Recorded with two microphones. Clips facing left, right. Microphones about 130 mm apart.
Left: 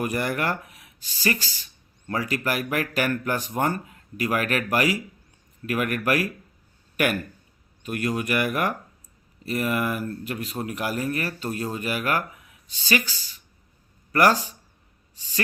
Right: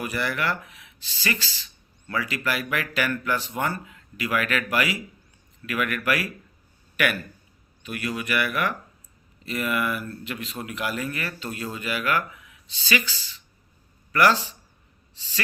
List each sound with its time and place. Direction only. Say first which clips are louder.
0.0 s speech: left 2 dB; 45° left (ahead or behind)